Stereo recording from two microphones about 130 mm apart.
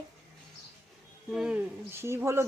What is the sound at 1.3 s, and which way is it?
Speech, 5° right (ahead or behind).